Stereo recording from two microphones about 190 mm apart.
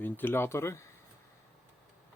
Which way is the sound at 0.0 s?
10° left (ahead or behind).